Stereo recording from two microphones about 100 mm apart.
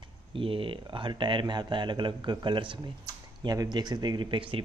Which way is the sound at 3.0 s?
40° right (ahead or behind).